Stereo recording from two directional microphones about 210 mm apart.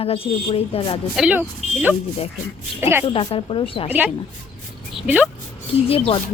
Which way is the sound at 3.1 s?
25° left (ahead or behind).